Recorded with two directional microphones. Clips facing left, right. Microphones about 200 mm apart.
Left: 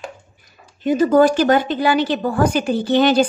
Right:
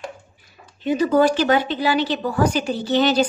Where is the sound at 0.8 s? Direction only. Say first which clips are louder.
Left 4 dB; 45° left (ahead or behind).